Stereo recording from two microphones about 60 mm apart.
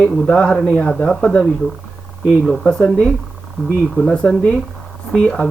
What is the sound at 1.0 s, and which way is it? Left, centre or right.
Speech, centre.